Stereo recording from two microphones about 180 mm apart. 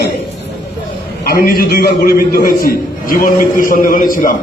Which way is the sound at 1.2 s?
55° left (ahead or behind).